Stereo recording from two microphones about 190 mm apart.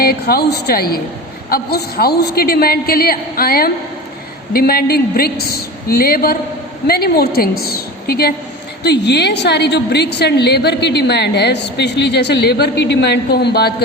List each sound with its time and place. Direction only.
0.0 s a woman's voice: 55° left (ahead or behind)